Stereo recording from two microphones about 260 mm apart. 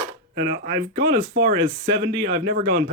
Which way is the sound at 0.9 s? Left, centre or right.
Right.